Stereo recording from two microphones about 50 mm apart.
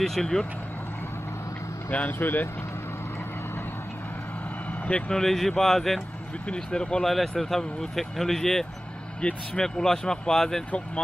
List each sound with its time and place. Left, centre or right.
0.0 s speech: centre
2.0 s speech: left
4.8 s speech: left
5.1 s speech: centre
6.5 s speech: centre
7.1 s speech: centre